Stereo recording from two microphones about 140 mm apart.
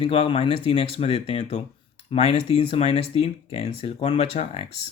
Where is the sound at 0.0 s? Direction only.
40° left (ahead or behind).